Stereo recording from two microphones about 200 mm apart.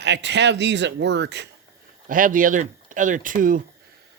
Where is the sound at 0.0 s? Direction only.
60° right (ahead or behind).